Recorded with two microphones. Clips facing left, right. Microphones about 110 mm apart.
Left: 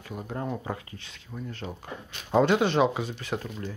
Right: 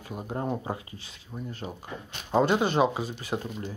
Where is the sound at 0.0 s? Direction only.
25° right (ahead or behind).